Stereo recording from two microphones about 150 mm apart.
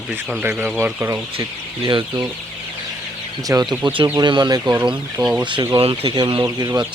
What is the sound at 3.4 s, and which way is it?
Speech, 25° right (ahead or behind).